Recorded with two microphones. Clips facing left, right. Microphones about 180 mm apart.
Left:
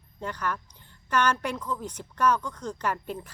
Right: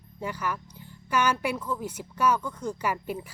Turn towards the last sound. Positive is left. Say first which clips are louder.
# right 1 dB
turn(degrees=-10)  # may be behind; listen again after turning